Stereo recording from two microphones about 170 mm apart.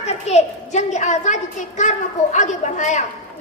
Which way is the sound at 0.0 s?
40° left (ahead or behind).